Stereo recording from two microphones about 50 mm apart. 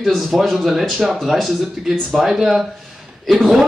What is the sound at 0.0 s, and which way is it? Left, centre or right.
Speech, centre.